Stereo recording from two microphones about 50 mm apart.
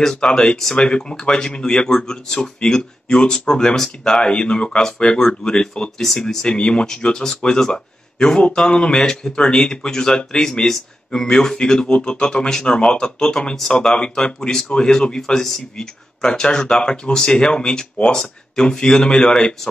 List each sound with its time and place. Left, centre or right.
0.0 s speech: centre
13.6 s speech: centre